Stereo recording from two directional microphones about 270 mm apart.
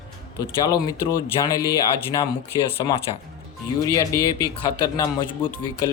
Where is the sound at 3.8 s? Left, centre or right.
Centre.